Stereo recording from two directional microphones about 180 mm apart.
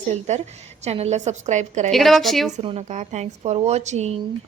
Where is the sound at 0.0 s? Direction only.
40° right (ahead or behind).